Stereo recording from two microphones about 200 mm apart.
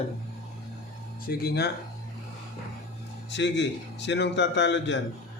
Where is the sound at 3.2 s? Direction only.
60° left (ahead or behind).